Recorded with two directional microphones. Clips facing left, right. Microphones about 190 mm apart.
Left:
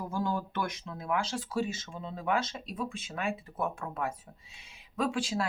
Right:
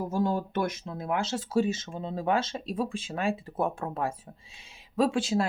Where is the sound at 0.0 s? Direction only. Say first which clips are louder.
Right 5 dB; 25° right (ahead or behind).